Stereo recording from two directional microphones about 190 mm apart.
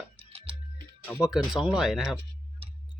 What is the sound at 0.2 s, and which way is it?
Music, 30° right (ahead or behind).